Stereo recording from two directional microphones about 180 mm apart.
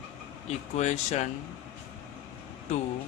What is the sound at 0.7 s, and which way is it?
Speech, 40° left (ahead or behind).